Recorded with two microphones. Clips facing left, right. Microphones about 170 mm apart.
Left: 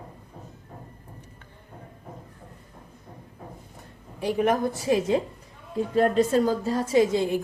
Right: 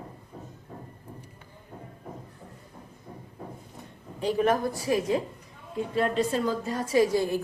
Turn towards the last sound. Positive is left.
turn(degrees=20)  # may be behind; listen again after turning